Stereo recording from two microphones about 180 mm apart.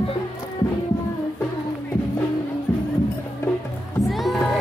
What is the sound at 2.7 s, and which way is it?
Music, 10° left (ahead or behind).